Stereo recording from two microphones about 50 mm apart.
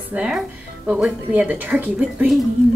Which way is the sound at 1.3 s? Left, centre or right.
Right.